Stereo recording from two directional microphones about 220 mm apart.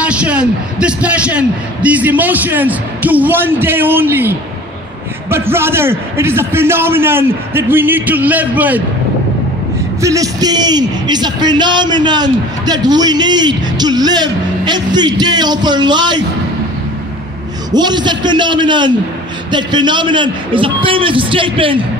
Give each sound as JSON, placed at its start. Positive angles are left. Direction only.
{"t": 0.0, "sound": "a man's voice", "side_deg": -5}
{"t": 10.0, "sound": "a man's voice", "side_deg": -15}
{"t": 17.6, "sound": "a man's voice", "side_deg": -20}